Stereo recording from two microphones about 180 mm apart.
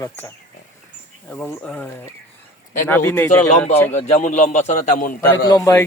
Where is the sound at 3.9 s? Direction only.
40° left (ahead or behind).